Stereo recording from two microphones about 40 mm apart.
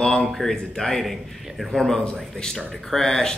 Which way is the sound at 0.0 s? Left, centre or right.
Centre.